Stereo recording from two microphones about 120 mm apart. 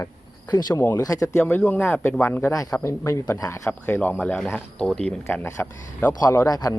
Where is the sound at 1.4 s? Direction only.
10° left (ahead or behind).